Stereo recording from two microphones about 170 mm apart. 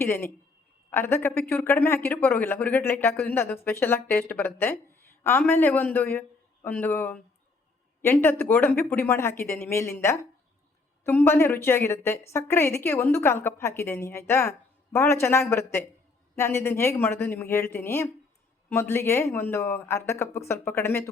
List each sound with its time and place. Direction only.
0.0 s a woman's voice: 15° left (ahead or behind)